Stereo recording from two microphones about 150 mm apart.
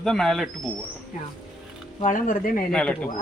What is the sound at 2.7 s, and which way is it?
Speech, 5° left (ahead or behind).